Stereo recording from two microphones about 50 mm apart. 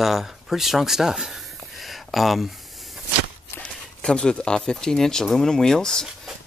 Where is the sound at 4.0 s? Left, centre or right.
Centre.